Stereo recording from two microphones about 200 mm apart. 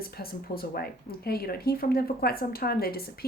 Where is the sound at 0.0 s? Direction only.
50° left (ahead or behind).